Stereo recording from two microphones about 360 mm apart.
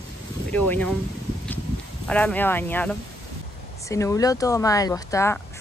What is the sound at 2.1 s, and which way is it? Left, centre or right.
Speech, centre.